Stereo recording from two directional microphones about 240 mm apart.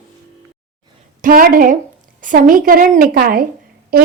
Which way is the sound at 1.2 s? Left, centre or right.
Right.